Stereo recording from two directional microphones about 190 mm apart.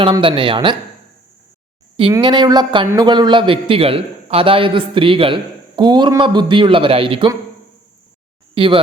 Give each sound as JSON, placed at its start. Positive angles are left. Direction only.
{"t": 0.0, "sound": "a man's voice", "side_deg": -25}
{"t": 2.1, "sound": "a man's voice", "side_deg": -25}
{"t": 8.5, "sound": "speech", "side_deg": -25}